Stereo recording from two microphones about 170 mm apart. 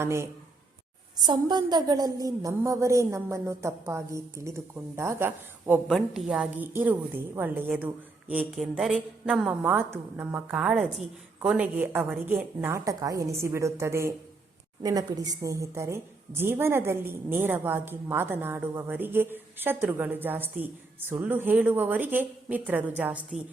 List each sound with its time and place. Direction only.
0.0 s a woman's voice: 15° right (ahead or behind)